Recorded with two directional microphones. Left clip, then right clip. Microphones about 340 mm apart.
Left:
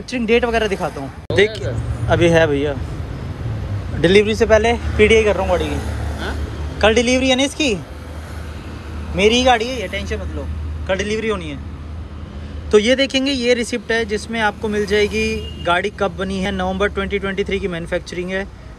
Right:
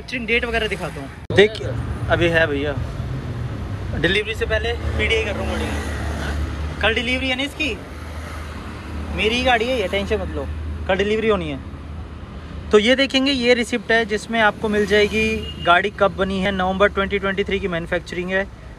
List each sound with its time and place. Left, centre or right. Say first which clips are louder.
0.1 s a man's voice: left 4 dB; centre
4.0 s a man's voice: left 7 dB; centre
6.8 s a man's voice: left 6 dB; centre
9.1 s speech: left 4 dB; centre
12.7 s speech: left 1 dB; centre